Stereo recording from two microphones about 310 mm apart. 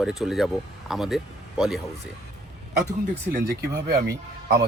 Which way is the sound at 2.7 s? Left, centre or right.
Right.